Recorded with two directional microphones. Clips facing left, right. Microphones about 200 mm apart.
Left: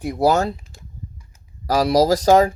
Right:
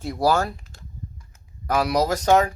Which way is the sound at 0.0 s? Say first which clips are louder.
Left 4 dB; 20° left (ahead or behind).